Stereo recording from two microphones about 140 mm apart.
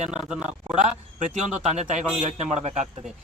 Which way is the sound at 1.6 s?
50° right (ahead or behind).